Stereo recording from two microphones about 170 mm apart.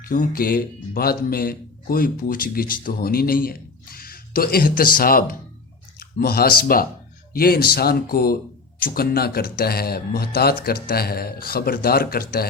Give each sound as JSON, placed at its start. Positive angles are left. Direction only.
{"t": 0.0, "sound": "speech", "side_deg": 55}